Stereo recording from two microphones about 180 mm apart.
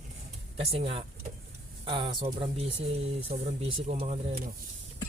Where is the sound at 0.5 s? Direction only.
35° right (ahead or behind).